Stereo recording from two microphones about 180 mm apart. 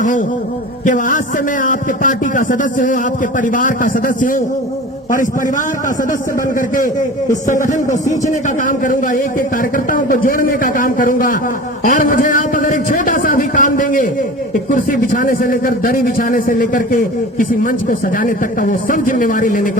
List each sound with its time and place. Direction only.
0.9 s a man's voice: 45° left (ahead or behind)
6.6 s a man's voice: 50° left (ahead or behind)